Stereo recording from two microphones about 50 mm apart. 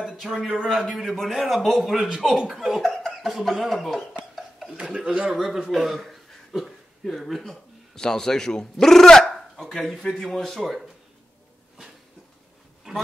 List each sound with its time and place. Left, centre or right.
0.0 s a man's voice: centre
4.4 s a sound: centre
4.7 s speech: right
5.3 s speech: centre
7.9 s a man's voice: centre